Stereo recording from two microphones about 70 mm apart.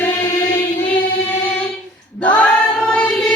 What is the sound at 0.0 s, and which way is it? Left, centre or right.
Chant, left.